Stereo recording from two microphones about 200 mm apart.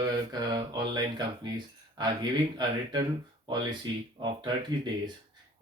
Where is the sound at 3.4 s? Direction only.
20° right (ahead or behind).